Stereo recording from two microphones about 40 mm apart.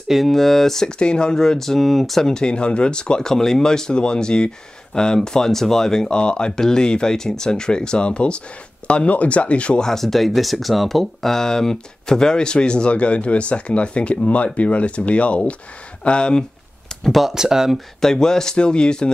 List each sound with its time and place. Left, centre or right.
0.3 s speech: centre
0.8 s speech: left
6.0 s speech: left
9.8 s speech: centre
17.0 s speech: centre
17.3 s speech: centre
17.7 s speech: centre